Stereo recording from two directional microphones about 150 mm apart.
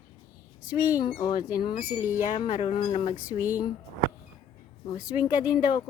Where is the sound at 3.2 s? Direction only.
10° right (ahead or behind).